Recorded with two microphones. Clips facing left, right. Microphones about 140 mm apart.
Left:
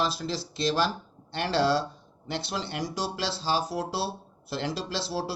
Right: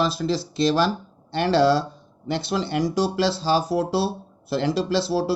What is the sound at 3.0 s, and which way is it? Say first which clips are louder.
Speech: right 10 dB; 50° right (ahead or behind).